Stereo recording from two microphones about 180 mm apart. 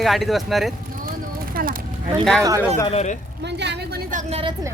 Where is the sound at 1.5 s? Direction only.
50° right (ahead or behind).